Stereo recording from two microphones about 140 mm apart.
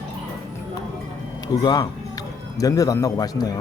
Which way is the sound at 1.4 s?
30° left (ahead or behind).